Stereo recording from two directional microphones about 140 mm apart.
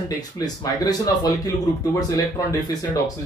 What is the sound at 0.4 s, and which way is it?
Speech, 30° left (ahead or behind).